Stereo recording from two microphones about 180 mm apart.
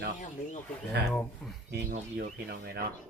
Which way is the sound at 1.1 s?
5° left (ahead or behind).